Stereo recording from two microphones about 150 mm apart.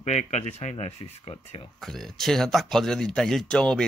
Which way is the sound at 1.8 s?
Centre (ahead or behind).